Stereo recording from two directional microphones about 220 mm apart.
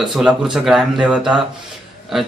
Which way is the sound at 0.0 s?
Centre (ahead or behind).